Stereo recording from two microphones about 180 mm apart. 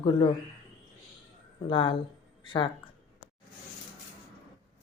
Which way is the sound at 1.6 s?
30° left (ahead or behind).